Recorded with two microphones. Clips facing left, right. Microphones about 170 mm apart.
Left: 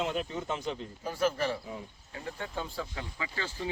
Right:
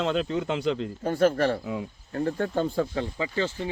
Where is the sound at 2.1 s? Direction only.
60° right (ahead or behind).